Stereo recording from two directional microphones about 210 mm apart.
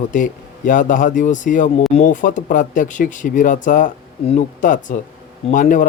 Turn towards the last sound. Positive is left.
turn(degrees=40)  # may be behind; listen again after turning